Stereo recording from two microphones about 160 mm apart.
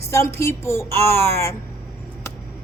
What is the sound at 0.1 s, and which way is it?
A woman's voice, 15° left (ahead or behind).